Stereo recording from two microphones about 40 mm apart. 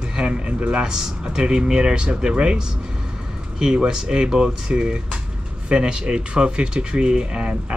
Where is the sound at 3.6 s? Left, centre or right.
Right.